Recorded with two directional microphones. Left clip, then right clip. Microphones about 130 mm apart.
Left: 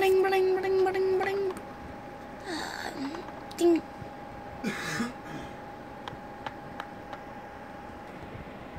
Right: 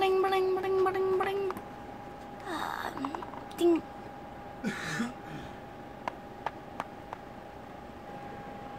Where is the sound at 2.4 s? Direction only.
15° right (ahead or behind).